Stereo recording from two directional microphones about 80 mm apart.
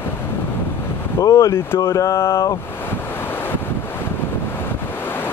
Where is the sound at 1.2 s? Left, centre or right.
Left.